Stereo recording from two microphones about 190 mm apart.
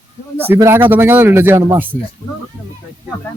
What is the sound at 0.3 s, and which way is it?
Speech, 10° right (ahead or behind).